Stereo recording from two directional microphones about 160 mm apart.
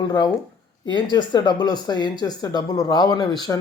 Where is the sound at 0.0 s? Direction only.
25° left (ahead or behind).